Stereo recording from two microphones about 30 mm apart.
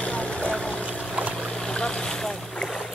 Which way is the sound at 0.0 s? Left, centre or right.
Left.